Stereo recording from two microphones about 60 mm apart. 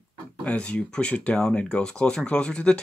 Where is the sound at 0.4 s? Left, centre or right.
Left.